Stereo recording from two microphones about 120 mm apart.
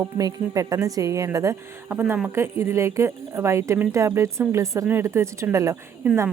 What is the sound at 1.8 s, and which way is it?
Speech, 15° right (ahead or behind).